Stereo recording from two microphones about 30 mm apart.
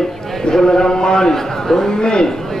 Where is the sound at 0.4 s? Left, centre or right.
Left.